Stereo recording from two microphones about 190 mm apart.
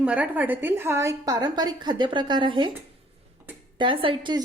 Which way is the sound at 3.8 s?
25° right (ahead or behind).